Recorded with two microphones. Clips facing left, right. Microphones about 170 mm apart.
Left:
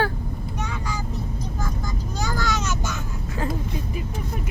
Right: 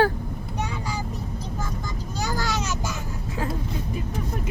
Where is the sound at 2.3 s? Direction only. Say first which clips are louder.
Left 2 dB; 35° right (ahead or behind).